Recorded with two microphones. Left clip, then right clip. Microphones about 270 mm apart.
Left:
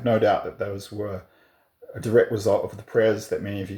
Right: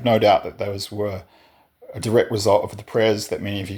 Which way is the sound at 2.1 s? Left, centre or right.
Right.